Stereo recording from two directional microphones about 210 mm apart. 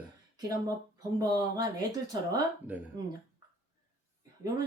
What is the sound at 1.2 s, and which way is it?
Speech, 15° right (ahead or behind).